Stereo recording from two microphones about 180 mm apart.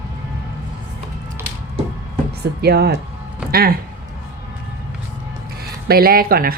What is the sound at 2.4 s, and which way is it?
Speech, 65° right (ahead or behind).